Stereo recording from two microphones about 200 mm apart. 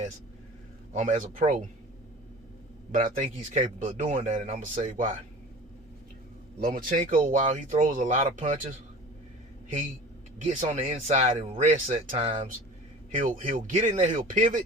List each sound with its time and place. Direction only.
1.2 s speech: 40° right (ahead or behind)
2.9 s speech: 35° right (ahead or behind)
6.6 s speech: 45° right (ahead or behind)
10.6 s speech: 30° right (ahead or behind)
13.1 s speech: 40° right (ahead or behind)